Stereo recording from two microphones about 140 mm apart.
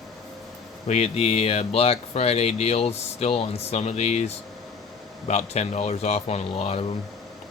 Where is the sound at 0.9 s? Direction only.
50° left (ahead or behind).